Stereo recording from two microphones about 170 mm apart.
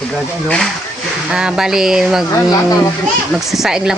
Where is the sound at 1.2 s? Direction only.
5° right (ahead or behind).